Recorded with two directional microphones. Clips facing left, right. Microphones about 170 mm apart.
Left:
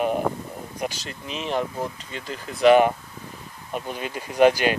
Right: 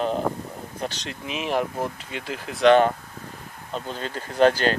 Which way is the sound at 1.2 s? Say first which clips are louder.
Right 1 dB; 5° right (ahead or behind).